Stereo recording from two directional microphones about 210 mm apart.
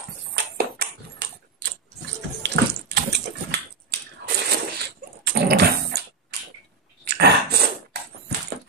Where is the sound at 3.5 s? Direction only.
50° right (ahead or behind).